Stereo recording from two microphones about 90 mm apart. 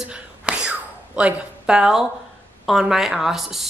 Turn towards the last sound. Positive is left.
turn(degrees=0)  # may be behind; listen again after turning